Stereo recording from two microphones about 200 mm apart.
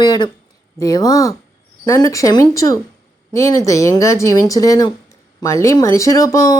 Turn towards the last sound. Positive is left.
turn(degrees=15)  # may be behind; listen again after turning